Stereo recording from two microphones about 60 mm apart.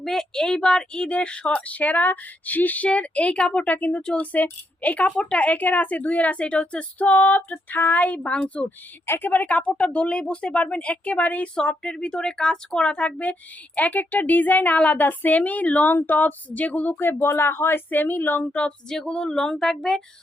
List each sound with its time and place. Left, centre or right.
0.0 s a woman's voice: centre
9.0 s a woman's voice: left
18.9 s speech: centre